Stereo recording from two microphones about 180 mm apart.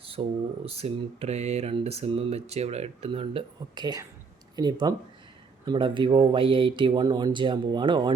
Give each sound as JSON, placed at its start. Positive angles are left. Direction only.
{"t": 0.0, "sound": "speech", "side_deg": -30}